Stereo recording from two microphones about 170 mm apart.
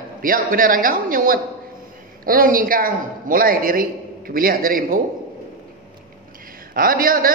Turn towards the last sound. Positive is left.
turn(degrees=-55)  # may be behind; listen again after turning